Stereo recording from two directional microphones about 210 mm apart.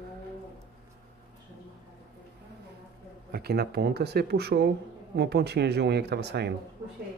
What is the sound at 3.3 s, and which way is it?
Speech, 50° right (ahead or behind).